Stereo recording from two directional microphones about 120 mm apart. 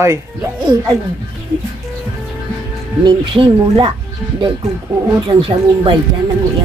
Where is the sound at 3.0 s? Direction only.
45° right (ahead or behind).